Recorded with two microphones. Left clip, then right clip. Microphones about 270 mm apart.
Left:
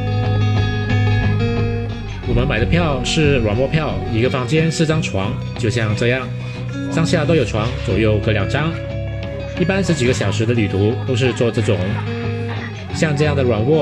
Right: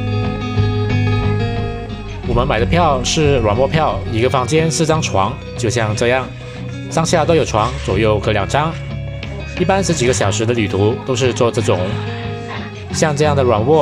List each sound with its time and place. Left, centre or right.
0.9 s music: centre
2.3 s speech: right
9.7 s speech: right
12.9 s speech: right